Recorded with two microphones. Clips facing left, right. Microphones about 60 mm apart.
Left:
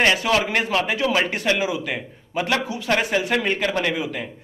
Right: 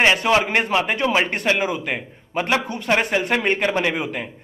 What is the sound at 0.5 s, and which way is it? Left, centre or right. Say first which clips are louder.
Speech: right 2 dB; right.